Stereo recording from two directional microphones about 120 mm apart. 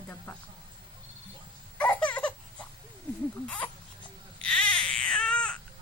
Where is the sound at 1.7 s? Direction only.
10° left (ahead or behind).